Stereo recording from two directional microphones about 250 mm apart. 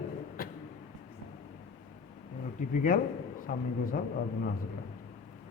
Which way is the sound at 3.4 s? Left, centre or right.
Left.